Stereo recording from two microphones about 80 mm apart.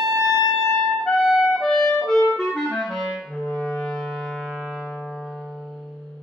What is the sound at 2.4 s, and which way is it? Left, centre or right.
Clarinet, centre.